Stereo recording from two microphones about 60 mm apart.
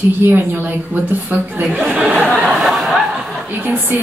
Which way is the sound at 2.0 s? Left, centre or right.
Centre.